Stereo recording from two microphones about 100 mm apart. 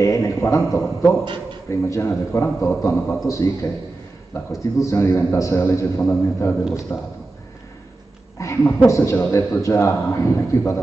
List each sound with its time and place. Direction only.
0.0 s a man's voice: 30° left (ahead or behind)
1.2 s a man's voice: 50° right (ahead or behind)
1.7 s a man's voice: 25° left (ahead or behind)
4.8 s a man's voice: 25° left (ahead or behind)
8.4 s a man's voice: 30° left (ahead or behind)